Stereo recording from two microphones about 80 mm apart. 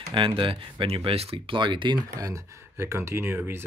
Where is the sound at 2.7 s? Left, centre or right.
Right.